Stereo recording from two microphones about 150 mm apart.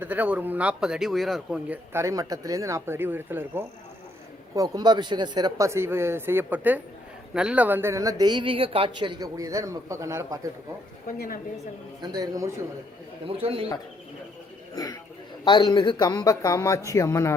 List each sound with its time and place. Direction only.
0.0 s a man's voice: 10° right (ahead or behind)
4.5 s speech: 25° right (ahead or behind)
12.0 s speech: 25° right (ahead or behind)
13.2 s speech: 40° right (ahead or behind)
14.8 s speech: 25° left (ahead or behind)